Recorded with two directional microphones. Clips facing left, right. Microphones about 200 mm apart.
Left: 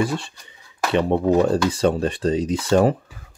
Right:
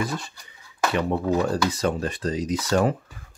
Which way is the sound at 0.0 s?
30° left (ahead or behind).